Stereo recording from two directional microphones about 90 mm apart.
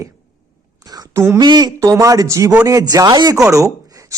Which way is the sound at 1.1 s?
30° right (ahead or behind).